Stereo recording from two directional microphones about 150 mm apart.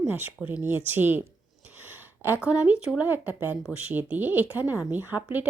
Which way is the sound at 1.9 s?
15° right (ahead or behind).